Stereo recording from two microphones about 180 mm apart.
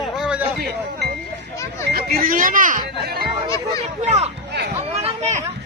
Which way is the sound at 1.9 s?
55° right (ahead or behind).